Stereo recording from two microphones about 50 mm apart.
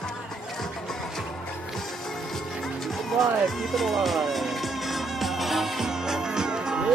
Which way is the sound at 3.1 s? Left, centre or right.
Centre.